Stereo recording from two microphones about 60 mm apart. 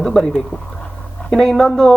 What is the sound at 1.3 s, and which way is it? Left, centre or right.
Speech, centre.